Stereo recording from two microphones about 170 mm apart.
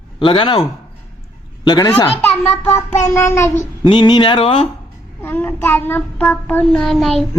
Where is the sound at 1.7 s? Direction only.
25° left (ahead or behind).